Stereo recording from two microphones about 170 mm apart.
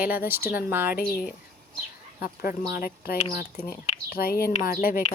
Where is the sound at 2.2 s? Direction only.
60° left (ahead or behind).